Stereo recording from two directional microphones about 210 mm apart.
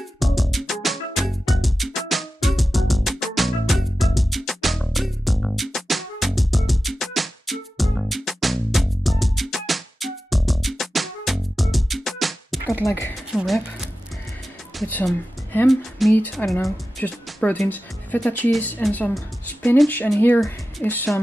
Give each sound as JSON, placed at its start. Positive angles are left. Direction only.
{"t": 0.2, "sound": "music", "side_deg": 0}
{"t": 12.8, "sound": "speech", "side_deg": 15}
{"t": 13.3, "sound": "a woman's voice", "side_deg": 0}